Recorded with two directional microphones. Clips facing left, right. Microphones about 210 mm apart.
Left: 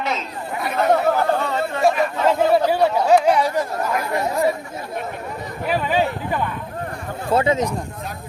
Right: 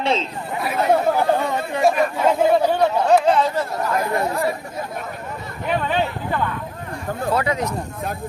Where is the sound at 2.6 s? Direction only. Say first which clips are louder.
Even; 10° left (ahead or behind).